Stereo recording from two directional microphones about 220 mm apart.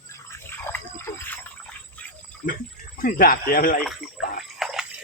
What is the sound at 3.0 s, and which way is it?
Speech, 40° left (ahead or behind).